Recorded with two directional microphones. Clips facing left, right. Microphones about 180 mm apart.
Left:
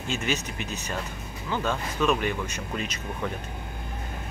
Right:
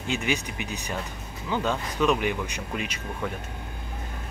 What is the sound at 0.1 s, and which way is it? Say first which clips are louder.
Speech: right 2 dB; 15° right (ahead or behind).